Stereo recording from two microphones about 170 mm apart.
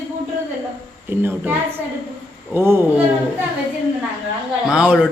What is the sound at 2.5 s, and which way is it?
Speech, 15° right (ahead or behind).